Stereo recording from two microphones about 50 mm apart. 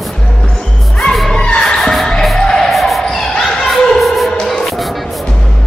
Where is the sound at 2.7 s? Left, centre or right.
Centre.